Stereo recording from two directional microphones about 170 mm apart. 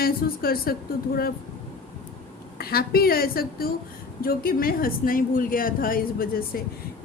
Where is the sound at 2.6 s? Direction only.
65° left (ahead or behind).